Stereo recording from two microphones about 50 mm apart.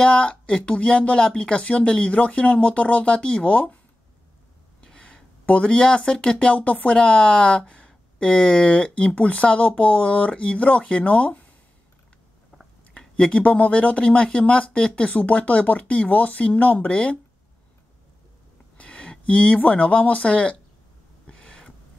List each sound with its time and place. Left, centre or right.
0.0 s speech: centre
4.8 s a sound: centre
5.4 s speech: left
13.3 s speech: left
16.9 s speech: centre
18.8 s speech: left
21.3 s a sound: centre